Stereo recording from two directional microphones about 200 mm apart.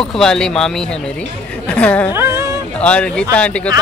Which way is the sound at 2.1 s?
15° right (ahead or behind).